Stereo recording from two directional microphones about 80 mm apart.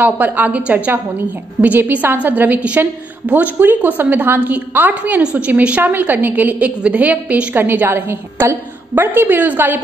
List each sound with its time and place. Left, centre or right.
0.0 s a woman's voice: right